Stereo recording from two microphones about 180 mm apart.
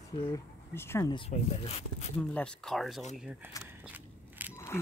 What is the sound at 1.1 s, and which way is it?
Speech, 35° left (ahead or behind).